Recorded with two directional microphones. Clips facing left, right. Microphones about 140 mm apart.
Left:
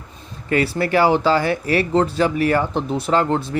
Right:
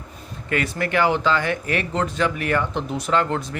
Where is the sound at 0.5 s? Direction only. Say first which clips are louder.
Left 5 dB; 35° left (ahead or behind).